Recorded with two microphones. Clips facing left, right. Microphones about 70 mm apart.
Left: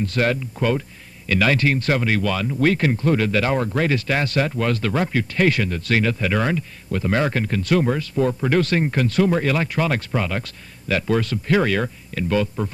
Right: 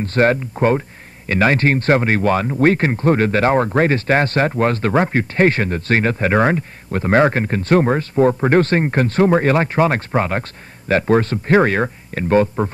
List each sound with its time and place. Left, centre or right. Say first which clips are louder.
0.0 s speech: right 5 dB; right